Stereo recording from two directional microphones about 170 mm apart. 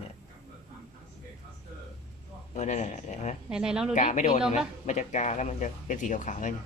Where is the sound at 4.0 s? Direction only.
45° left (ahead or behind).